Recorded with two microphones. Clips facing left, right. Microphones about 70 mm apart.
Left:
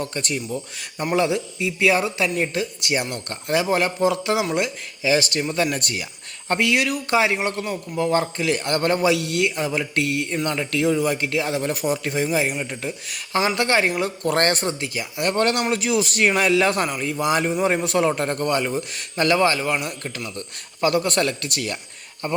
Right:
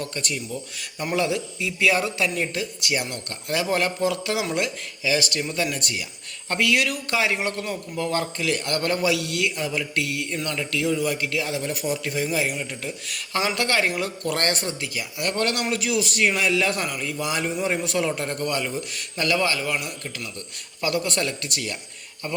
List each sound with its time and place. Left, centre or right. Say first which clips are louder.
0.0 s a man's voice: left 3 dB; left
5.7 s a man's voice: left 3 dB; left
6.5 s a man's voice: left 2 dB; left
14.3 s a man's voice: left 6 dB; left
22.2 s a man's voice: left 5 dB; left